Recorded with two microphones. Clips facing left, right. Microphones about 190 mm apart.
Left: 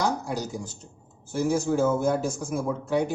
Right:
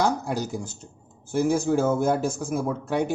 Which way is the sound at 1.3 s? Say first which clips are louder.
Right 2 dB; 55° right (ahead or behind).